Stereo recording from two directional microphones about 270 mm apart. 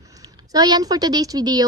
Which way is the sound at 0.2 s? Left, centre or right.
Centre.